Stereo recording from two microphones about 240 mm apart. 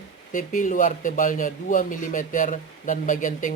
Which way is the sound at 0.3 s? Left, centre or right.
Left.